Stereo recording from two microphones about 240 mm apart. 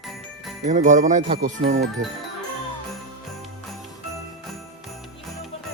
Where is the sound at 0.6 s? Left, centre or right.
Right.